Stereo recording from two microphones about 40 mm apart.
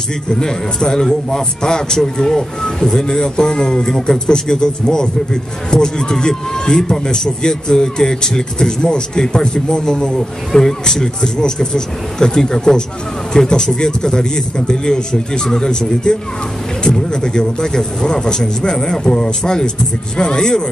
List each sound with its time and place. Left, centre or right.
0.3 s speech: centre